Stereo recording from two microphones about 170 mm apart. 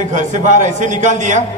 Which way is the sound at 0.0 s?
45° right (ahead or behind).